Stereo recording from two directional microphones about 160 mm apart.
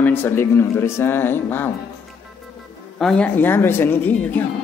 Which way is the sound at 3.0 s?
5° left (ahead or behind).